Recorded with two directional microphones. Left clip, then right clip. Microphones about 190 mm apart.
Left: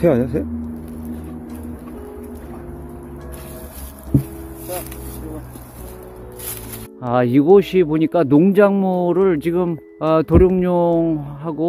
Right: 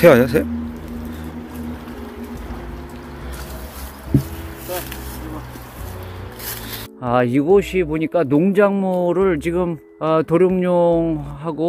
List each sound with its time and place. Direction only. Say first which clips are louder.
0.0 s a man's voice: right 6 dB; 5° right (ahead or behind)
7.0 s speech: even; centre (ahead or behind)
7.5 s a man's voice: left 3 dB; 30° left (ahead or behind); by 11.6 s 5° left (ahead or behind)